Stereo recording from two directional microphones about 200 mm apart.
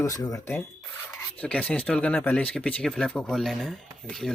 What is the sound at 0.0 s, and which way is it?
Speech, 15° left (ahead or behind).